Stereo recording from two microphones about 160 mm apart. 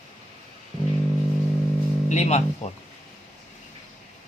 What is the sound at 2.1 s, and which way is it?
Speech, 45° left (ahead or behind).